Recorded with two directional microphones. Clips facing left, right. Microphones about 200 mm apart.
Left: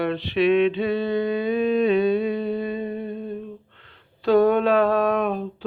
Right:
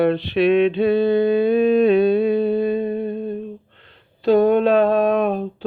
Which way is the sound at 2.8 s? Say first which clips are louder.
Right 6 dB; 40° right (ahead or behind).